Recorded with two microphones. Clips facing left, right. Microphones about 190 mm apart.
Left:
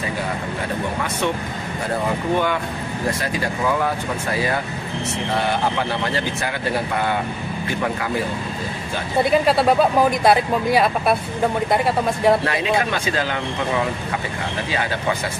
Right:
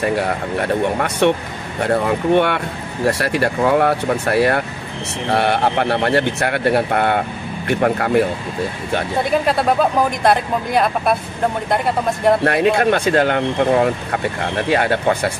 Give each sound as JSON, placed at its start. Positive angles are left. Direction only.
{"t": 0.0, "sound": "a man's voice", "side_deg": -70}
{"t": 9.2, "sound": "speech", "side_deg": 0}
{"t": 12.4, "sound": "a man's voice", "side_deg": -60}